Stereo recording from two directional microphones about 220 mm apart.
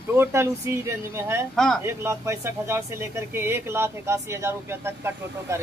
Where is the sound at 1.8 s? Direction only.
10° right (ahead or behind).